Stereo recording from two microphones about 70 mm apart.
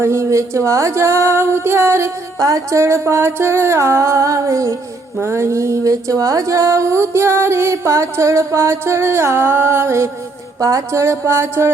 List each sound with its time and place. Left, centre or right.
0.0 s speech: right
10.6 s speech: right